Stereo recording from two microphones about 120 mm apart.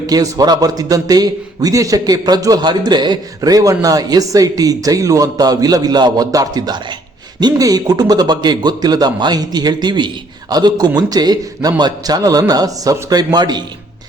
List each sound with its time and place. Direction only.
0.1 s a man's voice: 30° right (ahead or behind)